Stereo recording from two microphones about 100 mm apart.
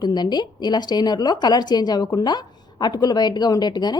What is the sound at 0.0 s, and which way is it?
A woman's voice, 45° left (ahead or behind).